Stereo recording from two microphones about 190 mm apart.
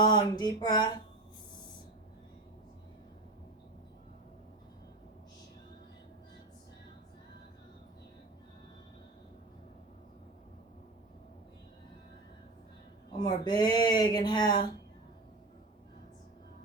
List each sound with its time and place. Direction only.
0.0 s speech: 20° left (ahead or behind)
13.1 s speech: 20° left (ahead or behind)